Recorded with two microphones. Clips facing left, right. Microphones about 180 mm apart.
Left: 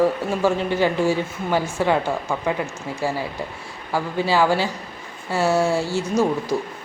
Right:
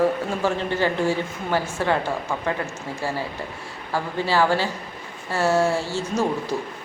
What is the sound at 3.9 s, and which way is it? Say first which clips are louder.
A woman's voice: left 2 dB; 15° left (ahead or behind).